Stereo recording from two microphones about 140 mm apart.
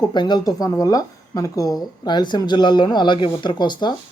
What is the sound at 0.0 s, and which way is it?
A man's voice, 30° left (ahead or behind).